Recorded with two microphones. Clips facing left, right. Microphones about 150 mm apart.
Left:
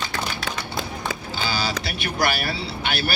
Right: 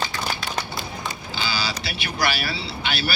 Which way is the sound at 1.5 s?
50° left (ahead or behind).